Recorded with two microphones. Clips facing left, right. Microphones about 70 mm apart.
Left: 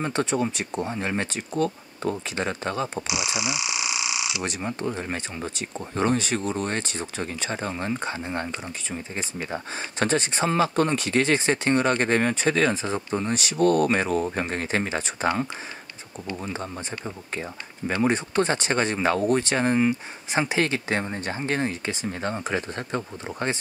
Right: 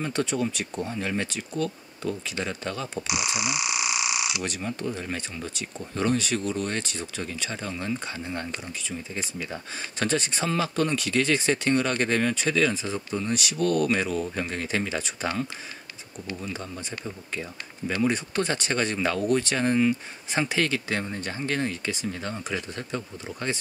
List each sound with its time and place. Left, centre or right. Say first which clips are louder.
0.0 s speech: left 2 dB; left
4.4 s speech: left 2 dB; left